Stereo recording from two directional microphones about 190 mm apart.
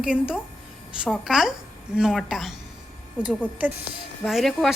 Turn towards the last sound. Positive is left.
turn(degrees=0)  # may be behind; listen again after turning